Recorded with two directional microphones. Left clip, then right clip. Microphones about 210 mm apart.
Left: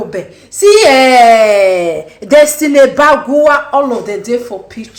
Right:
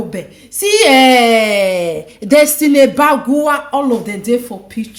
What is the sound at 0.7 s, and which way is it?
A woman's voice, 40° right (ahead or behind).